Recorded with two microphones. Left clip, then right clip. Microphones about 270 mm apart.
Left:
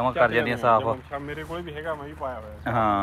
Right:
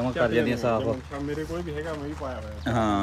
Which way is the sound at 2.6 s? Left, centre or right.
Centre.